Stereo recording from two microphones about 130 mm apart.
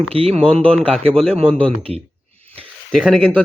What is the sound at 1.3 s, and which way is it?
Speech, 45° right (ahead or behind).